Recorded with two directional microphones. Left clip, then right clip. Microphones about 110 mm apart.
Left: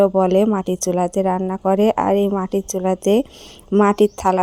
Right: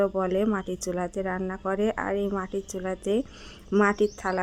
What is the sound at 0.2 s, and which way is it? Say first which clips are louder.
A woman's voice: left 10 dB; 45° left (ahead or behind).